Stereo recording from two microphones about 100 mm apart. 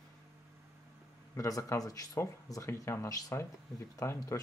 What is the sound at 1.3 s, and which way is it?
Speech, 30° left (ahead or behind).